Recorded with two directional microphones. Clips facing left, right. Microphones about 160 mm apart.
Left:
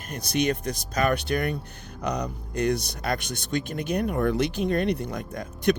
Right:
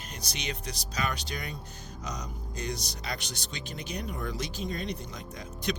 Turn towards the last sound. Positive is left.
turn(degrees=55)  # may be behind; listen again after turning